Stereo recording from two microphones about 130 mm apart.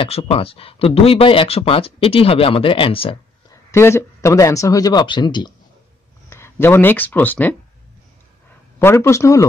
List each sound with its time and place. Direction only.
0.0 s speech: 45° left (ahead or behind)
3.4 s speech: 20° left (ahead or behind); by 5.5 s 35° left (ahead or behind)
6.3 s speech: 20° left (ahead or behind)
8.7 s a man's voice: 20° left (ahead or behind)